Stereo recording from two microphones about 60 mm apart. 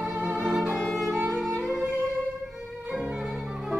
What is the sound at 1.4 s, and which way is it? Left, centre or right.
Music, centre.